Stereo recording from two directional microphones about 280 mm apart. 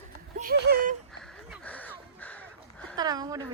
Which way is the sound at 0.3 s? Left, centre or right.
Right.